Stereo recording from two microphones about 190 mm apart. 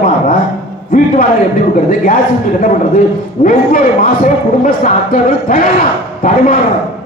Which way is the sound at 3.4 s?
45° left (ahead or behind).